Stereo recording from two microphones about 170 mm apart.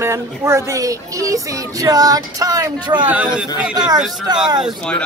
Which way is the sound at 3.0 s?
10° right (ahead or behind).